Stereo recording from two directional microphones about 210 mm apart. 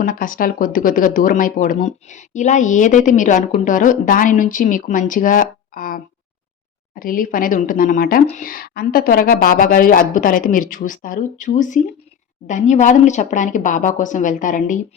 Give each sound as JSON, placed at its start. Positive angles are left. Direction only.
{"t": 0.0, "sound": "speech", "side_deg": 40}
{"t": 7.0, "sound": "speech", "side_deg": 40}